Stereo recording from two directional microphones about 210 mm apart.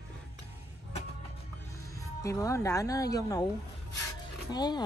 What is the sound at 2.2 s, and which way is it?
A woman's voice, 15° left (ahead or behind).